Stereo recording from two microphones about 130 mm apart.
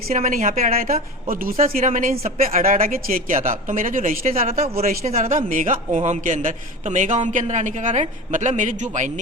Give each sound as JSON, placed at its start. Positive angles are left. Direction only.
{"t": 0.1, "sound": "a woman's voice", "side_deg": -75}
{"t": 1.3, "sound": "a man's voice", "side_deg": -90}
{"t": 2.9, "sound": "a woman's voice", "side_deg": -85}
{"t": 4.4, "sound": "speech", "side_deg": -55}
{"t": 5.3, "sound": "a man's voice", "side_deg": -85}